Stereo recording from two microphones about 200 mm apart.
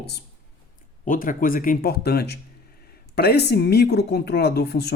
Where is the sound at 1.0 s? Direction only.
45° left (ahead or behind).